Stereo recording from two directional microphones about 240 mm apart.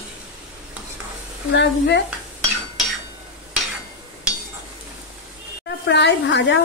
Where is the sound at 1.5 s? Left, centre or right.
Left.